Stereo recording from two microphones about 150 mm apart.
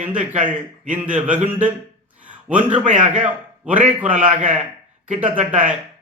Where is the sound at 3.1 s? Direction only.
10° right (ahead or behind).